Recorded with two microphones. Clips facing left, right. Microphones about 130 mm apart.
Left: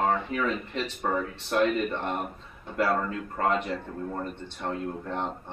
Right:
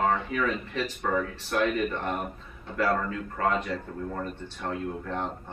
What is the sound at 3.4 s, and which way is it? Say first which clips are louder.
Speech: left 1 dB; 25° left (ahead or behind).